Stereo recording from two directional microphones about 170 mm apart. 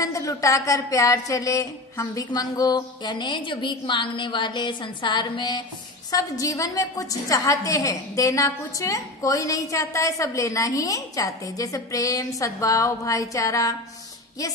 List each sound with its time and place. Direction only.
0.0 s a woman's voice: 20° left (ahead or behind)